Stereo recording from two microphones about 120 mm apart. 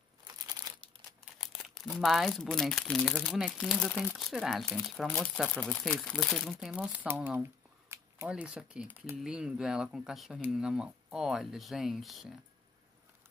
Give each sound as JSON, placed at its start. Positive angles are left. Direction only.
{"t": 1.4, "sound": "speech", "side_deg": 5}
{"t": 4.3, "sound": "speech", "side_deg": 0}
{"t": 6.8, "sound": "speech", "side_deg": -15}